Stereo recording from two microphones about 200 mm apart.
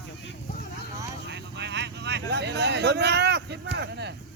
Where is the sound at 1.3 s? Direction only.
60° right (ahead or behind).